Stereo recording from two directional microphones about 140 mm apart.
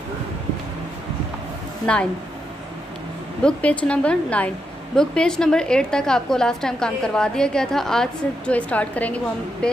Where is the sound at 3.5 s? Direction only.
10° left (ahead or behind).